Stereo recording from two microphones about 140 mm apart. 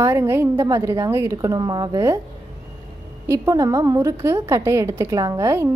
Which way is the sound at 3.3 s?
25° right (ahead or behind).